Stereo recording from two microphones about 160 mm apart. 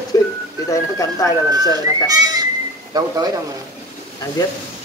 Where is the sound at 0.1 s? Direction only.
25° left (ahead or behind).